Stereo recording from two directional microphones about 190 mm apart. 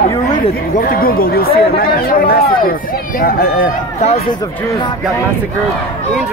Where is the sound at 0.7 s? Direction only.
50° left (ahead or behind).